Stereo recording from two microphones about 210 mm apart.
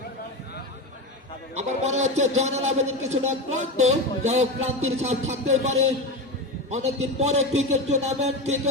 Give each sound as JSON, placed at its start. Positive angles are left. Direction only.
{"t": 1.5, "sound": "a man's voice", "side_deg": -30}